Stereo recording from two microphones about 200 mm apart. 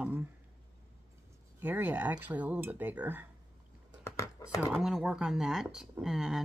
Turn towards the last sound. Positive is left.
turn(degrees=0)  # may be behind; listen again after turning